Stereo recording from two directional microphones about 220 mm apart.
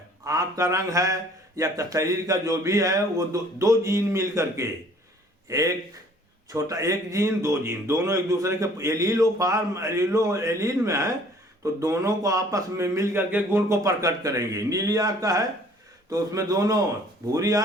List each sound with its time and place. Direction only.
0.3 s a man's voice: 15° right (ahead or behind)